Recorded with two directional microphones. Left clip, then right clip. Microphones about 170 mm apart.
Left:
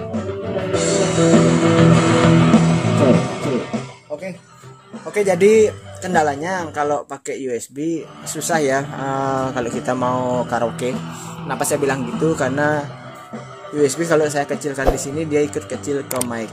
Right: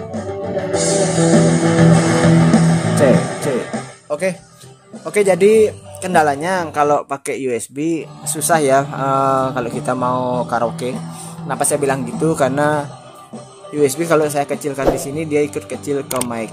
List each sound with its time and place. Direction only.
0.1 s music: 30° right (ahead or behind)
5.1 s speech: 15° right (ahead or behind)